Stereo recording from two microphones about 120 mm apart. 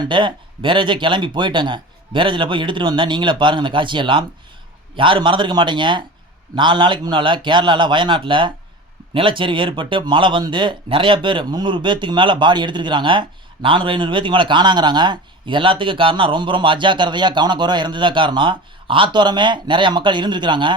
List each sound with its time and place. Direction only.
0.0 s speech: 40° right (ahead or behind)